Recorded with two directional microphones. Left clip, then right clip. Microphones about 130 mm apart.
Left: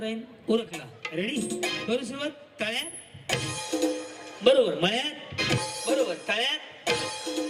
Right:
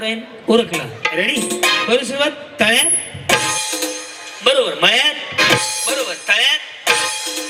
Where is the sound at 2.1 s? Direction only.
25° left (ahead or behind).